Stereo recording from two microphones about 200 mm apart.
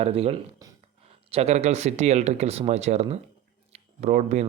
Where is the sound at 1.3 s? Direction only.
30° right (ahead or behind).